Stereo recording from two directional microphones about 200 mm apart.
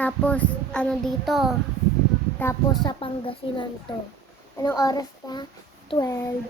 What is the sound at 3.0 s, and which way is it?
Child singing, 25° left (ahead or behind).